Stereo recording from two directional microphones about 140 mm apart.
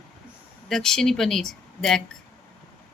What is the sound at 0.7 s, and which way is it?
Speech, 5° left (ahead or behind).